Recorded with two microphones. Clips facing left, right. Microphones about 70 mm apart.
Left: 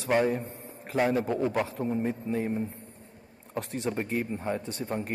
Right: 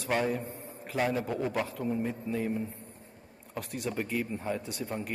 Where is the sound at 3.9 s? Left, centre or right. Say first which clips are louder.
Left 2 dB; left.